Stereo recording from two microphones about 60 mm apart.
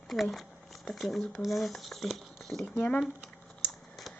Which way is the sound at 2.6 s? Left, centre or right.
Centre.